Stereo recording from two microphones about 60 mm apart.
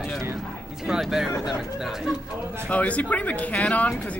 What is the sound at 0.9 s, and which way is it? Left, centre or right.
Speech, centre.